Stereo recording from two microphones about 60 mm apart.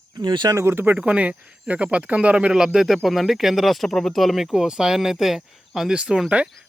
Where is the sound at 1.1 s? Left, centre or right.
Right; by 5.9 s centre.